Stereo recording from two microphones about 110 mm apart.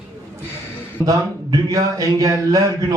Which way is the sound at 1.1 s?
35° right (ahead or behind).